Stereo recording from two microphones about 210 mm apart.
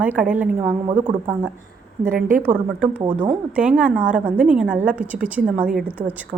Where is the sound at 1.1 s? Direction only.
15° right (ahead or behind).